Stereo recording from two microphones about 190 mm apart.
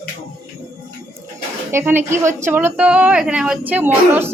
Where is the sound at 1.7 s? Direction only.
10° right (ahead or behind).